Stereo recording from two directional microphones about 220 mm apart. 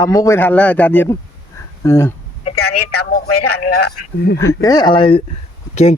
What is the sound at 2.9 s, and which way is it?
Speech, 45° left (ahead or behind).